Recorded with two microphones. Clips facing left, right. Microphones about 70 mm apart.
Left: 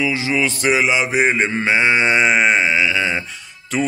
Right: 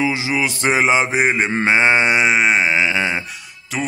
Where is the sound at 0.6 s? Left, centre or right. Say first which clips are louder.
Right 3 dB; right.